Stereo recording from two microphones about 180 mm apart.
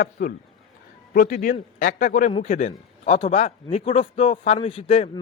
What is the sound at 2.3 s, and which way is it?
A man's voice, 35° left (ahead or behind).